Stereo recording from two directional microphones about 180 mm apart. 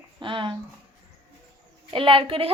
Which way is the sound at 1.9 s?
30° right (ahead or behind).